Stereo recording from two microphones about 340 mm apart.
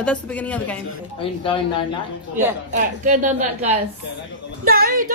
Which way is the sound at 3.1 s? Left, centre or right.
Right.